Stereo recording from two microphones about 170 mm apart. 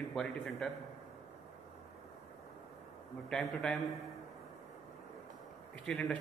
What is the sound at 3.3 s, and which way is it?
Speech, 5° left (ahead or behind).